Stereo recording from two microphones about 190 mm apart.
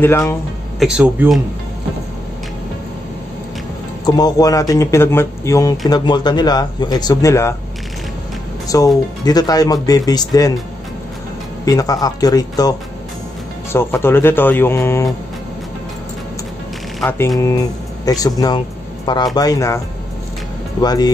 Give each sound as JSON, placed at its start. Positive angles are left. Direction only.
{"t": 0.0, "sound": "speech", "side_deg": 10}
{"t": 0.7, "sound": "speech", "side_deg": -5}
{"t": 4.0, "sound": "speech", "side_deg": 20}
{"t": 8.6, "sound": "speech", "side_deg": 20}
{"t": 11.6, "sound": "speech", "side_deg": 20}
{"t": 18.0, "sound": "speech", "side_deg": 20}
{"t": 20.8, "sound": "speech", "side_deg": 20}